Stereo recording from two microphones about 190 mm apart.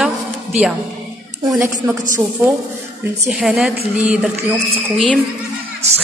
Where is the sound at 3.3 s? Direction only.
Centre (ahead or behind).